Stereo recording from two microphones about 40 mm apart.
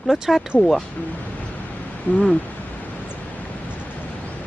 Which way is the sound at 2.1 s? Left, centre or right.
Left.